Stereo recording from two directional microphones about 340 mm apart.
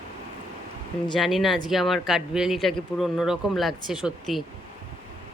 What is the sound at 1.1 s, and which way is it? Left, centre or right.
Speech, centre.